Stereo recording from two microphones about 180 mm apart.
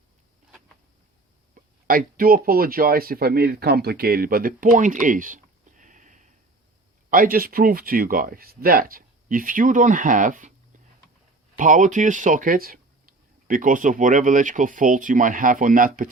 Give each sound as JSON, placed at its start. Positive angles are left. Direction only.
{"t": 1.5, "sound": "speech", "side_deg": -50}
{"t": 11.5, "sound": "speech", "side_deg": -45}